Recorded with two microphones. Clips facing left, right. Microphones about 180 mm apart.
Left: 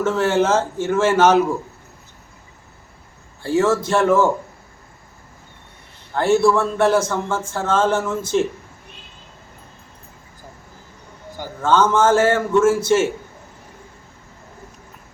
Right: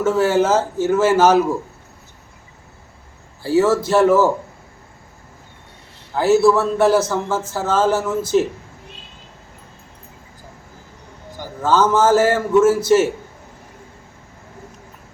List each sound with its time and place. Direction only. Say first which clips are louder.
0.0 s speech: right 2 dB; 5° right (ahead or behind)
3.4 s speech: right 2 dB; 5° right (ahead or behind)
6.1 s a man's voice: right 2 dB; 5° right (ahead or behind)
11.6 s speech: right 1 dB; 5° right (ahead or behind)